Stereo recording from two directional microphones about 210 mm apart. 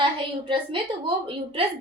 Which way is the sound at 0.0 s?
25° right (ahead or behind).